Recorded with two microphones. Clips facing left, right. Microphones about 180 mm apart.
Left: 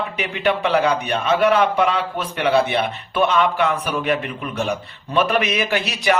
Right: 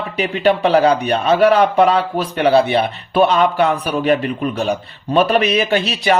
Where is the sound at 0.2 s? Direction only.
35° right (ahead or behind).